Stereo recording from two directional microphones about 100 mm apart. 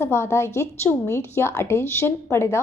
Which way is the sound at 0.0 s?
25° left (ahead or behind).